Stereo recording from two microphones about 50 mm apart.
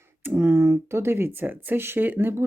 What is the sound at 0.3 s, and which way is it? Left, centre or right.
Speech, right.